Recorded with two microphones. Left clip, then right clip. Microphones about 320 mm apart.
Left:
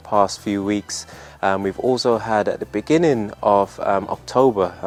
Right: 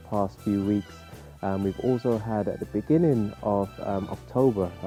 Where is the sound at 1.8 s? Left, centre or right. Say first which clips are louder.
Left 9 dB; left.